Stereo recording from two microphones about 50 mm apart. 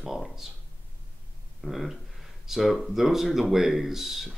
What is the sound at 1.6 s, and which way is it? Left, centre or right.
Speech, centre.